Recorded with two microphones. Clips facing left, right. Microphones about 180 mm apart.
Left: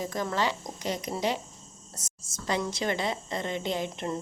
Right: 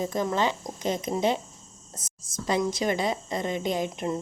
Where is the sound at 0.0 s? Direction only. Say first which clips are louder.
Right 3 dB; 20° right (ahead or behind).